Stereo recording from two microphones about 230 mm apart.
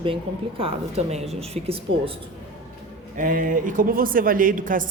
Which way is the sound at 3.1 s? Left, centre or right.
Right.